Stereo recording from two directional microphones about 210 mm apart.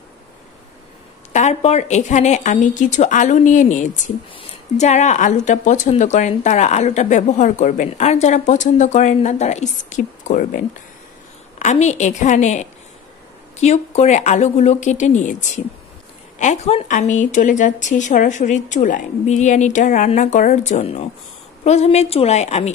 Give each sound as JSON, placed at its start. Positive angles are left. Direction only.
{"t": 1.3, "sound": "a woman's voice", "side_deg": 30}